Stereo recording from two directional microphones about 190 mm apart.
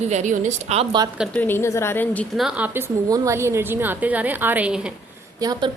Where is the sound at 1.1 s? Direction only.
5° right (ahead or behind).